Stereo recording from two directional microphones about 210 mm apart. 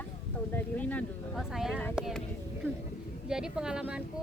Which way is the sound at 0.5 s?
5° left (ahead or behind).